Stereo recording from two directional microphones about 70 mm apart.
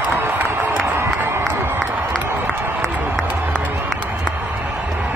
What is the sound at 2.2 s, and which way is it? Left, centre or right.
Run, right.